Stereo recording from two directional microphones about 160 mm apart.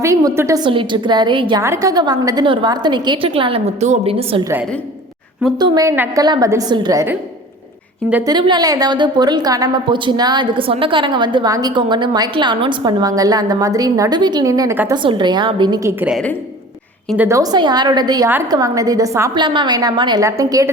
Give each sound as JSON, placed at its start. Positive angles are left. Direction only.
{"t": 0.0, "sound": "a woman's voice", "side_deg": -15}
{"t": 0.6, "sound": "a woman's voice", "side_deg": -30}
{"t": 1.6, "sound": "a woman's voice", "side_deg": -20}
{"t": 5.5, "sound": "a woman's voice", "side_deg": -25}
{"t": 8.2, "sound": "a woman's voice", "side_deg": -30}
{"t": 17.2, "sound": "a woman's voice", "side_deg": -20}
{"t": 19.4, "sound": "a woman's voice", "side_deg": -30}